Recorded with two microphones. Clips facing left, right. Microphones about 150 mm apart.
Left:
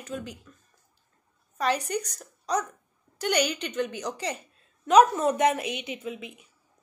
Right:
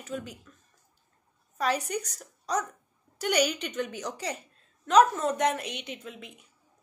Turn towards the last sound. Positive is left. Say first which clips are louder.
# left 5 dB
turn(degrees=5)  # may be behind; listen again after turning